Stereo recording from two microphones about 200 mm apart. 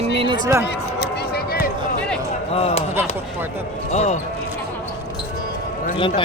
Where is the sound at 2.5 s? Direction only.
30° left (ahead or behind).